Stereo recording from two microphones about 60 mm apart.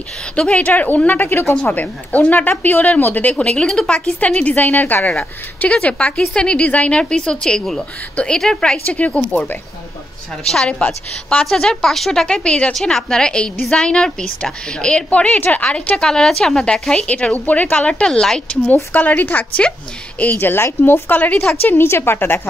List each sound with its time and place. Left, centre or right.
0.4 s a woman's voice: left
1.4 s a woman's voice: centre
1.8 s a woman's voice: left
5.6 s a woman's voice: left
8.8 s a woman's voice: left
10.8 s a woman's voice: left
11.4 s a woman's voice: centre; by 16.0 s left
16.0 s a woman's voice: centre
18.9 s a woman's voice: left
20.3 s speech: left
21.2 s a woman's voice: left
21.5 s speech: left